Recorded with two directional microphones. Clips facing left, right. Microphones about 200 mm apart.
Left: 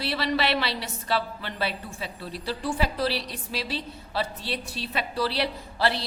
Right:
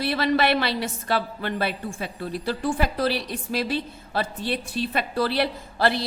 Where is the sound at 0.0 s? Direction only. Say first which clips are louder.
Right 5 dB; 50° right (ahead or behind).